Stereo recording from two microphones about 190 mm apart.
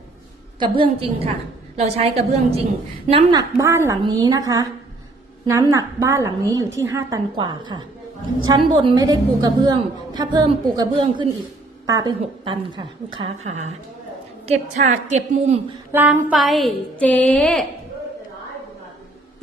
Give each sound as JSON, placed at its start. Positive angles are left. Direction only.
{"t": 0.6, "sound": "a woman's voice", "side_deg": -30}
{"t": 3.3, "sound": "a woman's voice", "side_deg": -15}
{"t": 15.9, "sound": "a woman's voice", "side_deg": -10}